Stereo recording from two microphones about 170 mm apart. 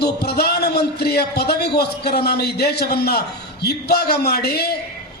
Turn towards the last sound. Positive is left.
turn(degrees=70)  # may be behind; listen again after turning